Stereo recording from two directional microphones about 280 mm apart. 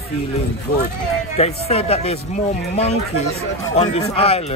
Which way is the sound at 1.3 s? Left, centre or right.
Left.